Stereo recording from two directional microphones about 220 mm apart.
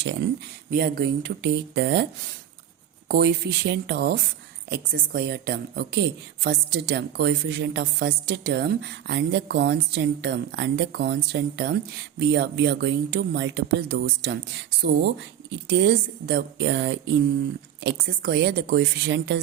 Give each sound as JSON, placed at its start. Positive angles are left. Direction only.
{"t": 0.7, "sound": "a woman's voice", "side_deg": -45}